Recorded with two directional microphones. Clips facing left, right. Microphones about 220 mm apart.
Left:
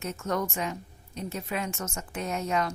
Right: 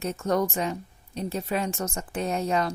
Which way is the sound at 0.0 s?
35° right (ahead or behind).